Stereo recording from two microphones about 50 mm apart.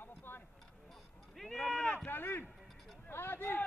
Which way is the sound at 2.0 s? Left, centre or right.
Left.